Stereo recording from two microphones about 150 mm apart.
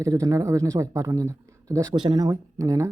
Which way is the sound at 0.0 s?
20° right (ahead or behind).